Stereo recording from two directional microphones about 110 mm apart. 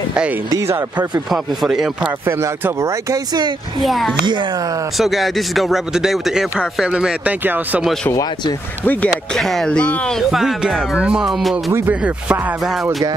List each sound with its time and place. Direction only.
0.1 s speech: 10° right (ahead or behind)
0.5 s speech: 30° right (ahead or behind)
0.7 s speech: 15° right (ahead or behind)
1.3 s speech: 5° right (ahead or behind)
2.2 s speech: 20° right (ahead or behind)
3.8 s speech: centre (ahead or behind)
4.3 s speech: 45° right (ahead or behind)
4.9 s speech: centre (ahead or behind)
7.8 s speech: 5° left (ahead or behind)
8.1 s speech: 35° left (ahead or behind)
8.8 s speech: 15° left (ahead or behind)
9.3 s speech: 5° left (ahead or behind)
11.7 s speech: 15° right (ahead or behind)